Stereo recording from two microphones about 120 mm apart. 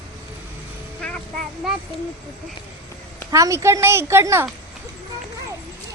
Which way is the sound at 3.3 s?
25° right (ahead or behind).